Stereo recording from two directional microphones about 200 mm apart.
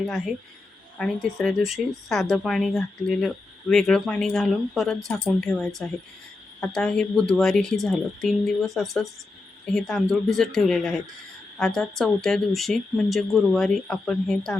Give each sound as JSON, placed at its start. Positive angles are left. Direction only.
{"t": 0.0, "sound": "speech", "side_deg": 0}